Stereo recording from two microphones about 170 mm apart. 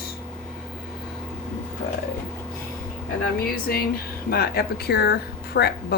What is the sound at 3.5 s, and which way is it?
A woman's voice, 60° left (ahead or behind).